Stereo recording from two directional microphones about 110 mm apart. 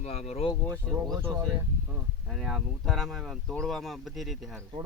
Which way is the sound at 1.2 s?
20° right (ahead or behind).